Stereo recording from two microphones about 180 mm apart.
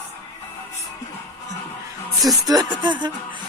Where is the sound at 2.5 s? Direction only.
20° right (ahead or behind).